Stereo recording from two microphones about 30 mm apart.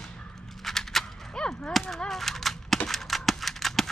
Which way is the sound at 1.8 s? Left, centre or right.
Centre.